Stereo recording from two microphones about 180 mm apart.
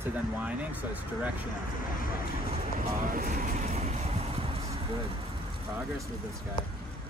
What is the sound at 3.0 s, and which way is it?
Music, 50° right (ahead or behind).